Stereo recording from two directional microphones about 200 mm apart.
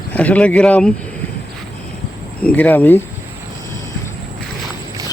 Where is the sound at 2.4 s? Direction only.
10° left (ahead or behind).